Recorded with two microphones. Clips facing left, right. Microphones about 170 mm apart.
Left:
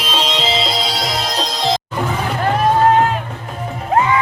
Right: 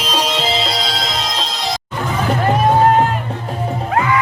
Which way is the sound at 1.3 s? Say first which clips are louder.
Left 2 dB; 40° left (ahead or behind).